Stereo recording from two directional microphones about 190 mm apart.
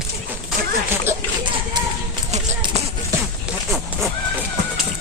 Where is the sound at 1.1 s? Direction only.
15° right (ahead or behind).